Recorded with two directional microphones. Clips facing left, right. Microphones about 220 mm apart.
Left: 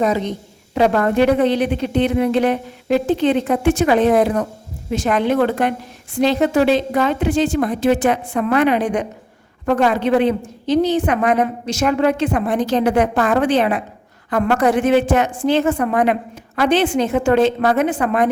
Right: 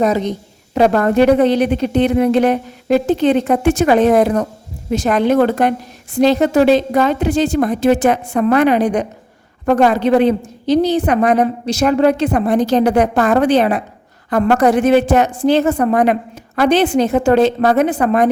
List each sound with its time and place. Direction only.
0.7 s a woman's voice: 40° right (ahead or behind)